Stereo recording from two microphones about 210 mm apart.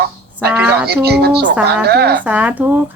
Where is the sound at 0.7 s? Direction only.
50° right (ahead or behind).